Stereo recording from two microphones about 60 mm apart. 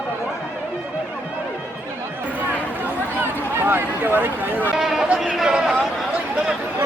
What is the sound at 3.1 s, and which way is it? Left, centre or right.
Speech, right.